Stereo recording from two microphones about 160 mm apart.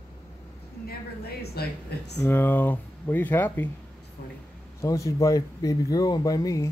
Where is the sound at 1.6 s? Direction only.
75° left (ahead or behind).